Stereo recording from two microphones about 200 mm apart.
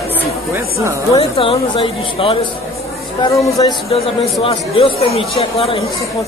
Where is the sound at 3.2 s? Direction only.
15° left (ahead or behind).